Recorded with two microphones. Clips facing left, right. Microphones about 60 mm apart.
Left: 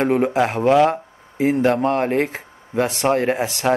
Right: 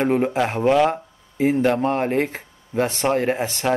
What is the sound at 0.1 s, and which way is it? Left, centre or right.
Speech, centre.